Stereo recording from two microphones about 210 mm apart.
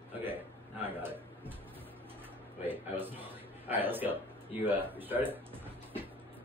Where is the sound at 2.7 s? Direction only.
10° right (ahead or behind).